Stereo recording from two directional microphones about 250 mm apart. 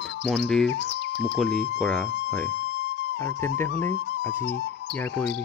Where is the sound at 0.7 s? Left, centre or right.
Left.